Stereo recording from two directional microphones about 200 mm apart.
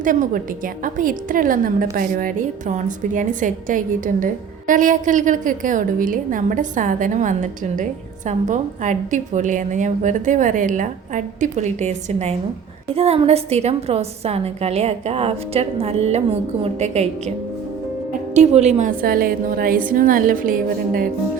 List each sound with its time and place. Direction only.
0.0 s a woman's voice: 40° right (ahead or behind)
18.3 s a woman's voice: 30° right (ahead or behind)